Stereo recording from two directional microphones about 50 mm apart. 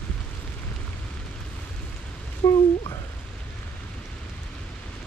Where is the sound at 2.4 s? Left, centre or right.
Left.